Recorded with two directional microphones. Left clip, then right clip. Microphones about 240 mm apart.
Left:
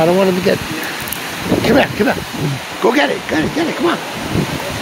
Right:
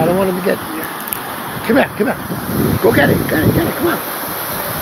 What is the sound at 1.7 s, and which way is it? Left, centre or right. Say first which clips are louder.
Speech: even; left.